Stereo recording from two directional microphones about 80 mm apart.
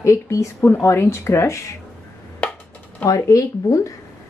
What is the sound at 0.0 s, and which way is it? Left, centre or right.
Speech, left.